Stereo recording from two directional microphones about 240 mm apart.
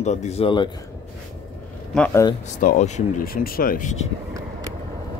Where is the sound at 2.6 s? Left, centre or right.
Left.